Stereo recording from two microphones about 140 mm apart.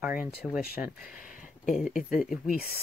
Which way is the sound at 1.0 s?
80° left.